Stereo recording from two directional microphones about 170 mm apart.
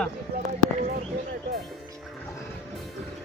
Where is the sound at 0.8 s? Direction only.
45° right (ahead or behind).